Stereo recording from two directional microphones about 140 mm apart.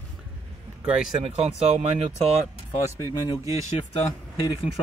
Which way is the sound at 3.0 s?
25° left (ahead or behind).